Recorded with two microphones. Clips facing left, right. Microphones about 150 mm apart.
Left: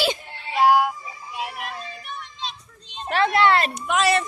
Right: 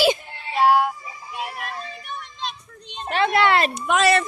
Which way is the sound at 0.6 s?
10° left (ahead or behind).